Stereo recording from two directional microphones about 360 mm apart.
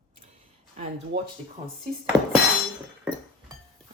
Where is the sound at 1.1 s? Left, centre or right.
Right.